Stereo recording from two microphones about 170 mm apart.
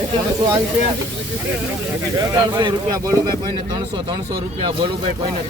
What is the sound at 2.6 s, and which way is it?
Speech, 25° right (ahead or behind).